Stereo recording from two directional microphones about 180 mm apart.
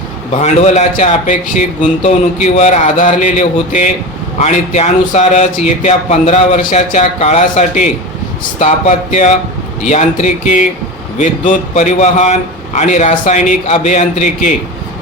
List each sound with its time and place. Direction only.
0.3 s a man's voice: 40° left (ahead or behind)